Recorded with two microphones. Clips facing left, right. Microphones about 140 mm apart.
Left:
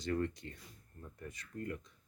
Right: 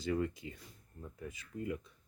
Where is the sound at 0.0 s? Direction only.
5° right (ahead or behind).